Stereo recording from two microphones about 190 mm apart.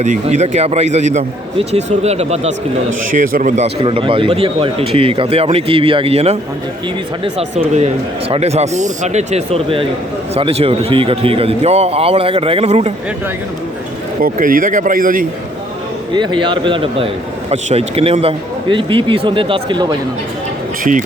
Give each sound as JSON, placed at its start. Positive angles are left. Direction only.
{"t": 0.0, "sound": "a man's voice", "side_deg": -40}
{"t": 14.2, "sound": "speech", "side_deg": -45}
{"t": 16.1, "sound": "a man's voice", "side_deg": -25}